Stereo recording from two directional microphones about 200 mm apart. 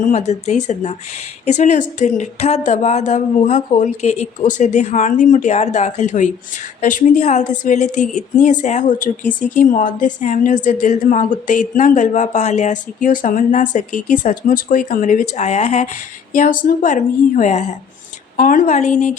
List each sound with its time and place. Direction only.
0.0 s a woman's voice: 35° left (ahead or behind)